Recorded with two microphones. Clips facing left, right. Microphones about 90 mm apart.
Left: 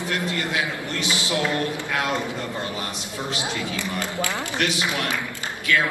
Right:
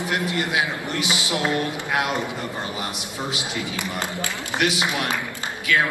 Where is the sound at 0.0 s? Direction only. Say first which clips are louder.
Right 2 dB; 20° right (ahead or behind).